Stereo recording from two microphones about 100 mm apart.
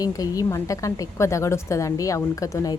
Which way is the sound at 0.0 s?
35° left (ahead or behind).